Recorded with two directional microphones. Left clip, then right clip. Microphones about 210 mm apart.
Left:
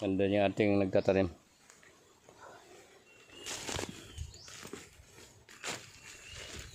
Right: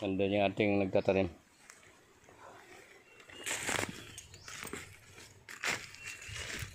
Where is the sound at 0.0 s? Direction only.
20° left (ahead or behind).